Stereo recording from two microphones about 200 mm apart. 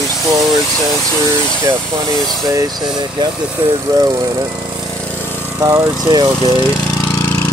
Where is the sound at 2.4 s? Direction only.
20° right (ahead or behind).